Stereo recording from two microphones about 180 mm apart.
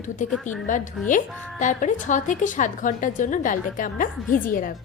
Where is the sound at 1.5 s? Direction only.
45° left (ahead or behind).